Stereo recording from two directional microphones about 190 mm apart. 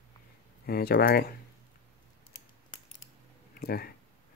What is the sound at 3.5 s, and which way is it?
Speech, 55° left (ahead or behind).